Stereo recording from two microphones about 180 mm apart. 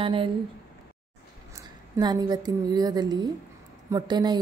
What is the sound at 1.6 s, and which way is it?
A woman's voice, 20° right (ahead or behind).